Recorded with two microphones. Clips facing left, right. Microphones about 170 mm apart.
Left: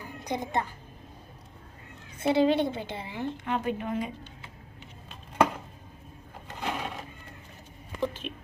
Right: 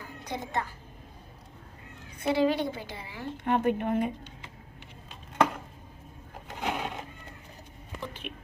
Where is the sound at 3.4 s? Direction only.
50° right (ahead or behind).